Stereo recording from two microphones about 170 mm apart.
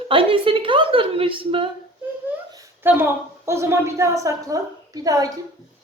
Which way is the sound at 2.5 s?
15° right (ahead or behind).